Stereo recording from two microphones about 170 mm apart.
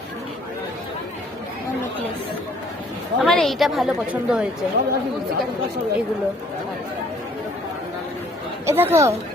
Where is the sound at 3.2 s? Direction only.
Centre (ahead or behind).